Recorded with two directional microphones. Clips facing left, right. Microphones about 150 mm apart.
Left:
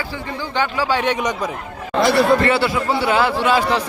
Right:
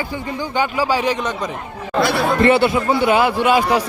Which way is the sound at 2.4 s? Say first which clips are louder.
Right 4 dB; 20° right (ahead or behind).